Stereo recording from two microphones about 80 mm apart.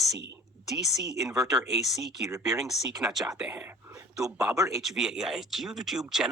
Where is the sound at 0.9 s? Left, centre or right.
Centre.